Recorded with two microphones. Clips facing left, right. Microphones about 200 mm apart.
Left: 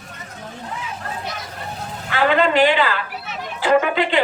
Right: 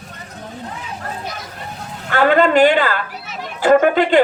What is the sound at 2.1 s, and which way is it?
Speech, 45° right (ahead or behind).